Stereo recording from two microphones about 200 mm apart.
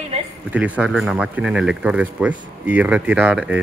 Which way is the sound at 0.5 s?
5° right (ahead or behind).